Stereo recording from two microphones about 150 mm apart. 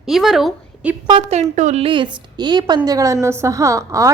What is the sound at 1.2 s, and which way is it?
Speech, 50° right (ahead or behind).